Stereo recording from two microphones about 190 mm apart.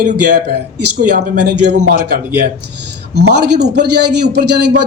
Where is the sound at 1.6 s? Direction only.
55° right (ahead or behind).